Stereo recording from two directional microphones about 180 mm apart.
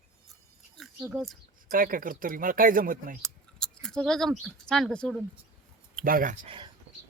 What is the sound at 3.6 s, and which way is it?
Speech, 5° left (ahead or behind).